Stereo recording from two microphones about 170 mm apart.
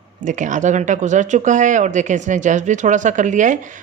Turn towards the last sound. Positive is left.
turn(degrees=-45)  # may be behind; listen again after turning